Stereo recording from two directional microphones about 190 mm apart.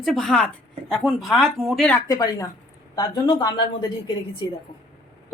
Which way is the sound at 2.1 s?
20° left (ahead or behind).